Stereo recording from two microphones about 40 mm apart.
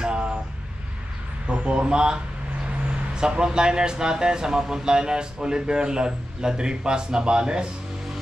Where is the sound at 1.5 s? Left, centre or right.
Right.